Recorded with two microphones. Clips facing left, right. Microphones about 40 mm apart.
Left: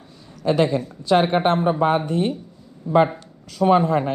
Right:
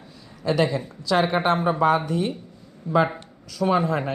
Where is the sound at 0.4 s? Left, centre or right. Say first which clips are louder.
Left 3 dB; left.